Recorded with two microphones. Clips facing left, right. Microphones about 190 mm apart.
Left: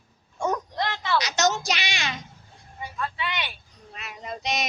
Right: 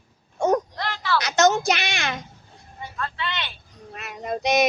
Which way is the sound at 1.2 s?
55° right (ahead or behind).